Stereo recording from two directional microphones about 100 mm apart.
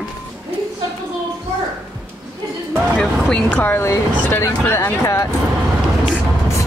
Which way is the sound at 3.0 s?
10° left (ahead or behind).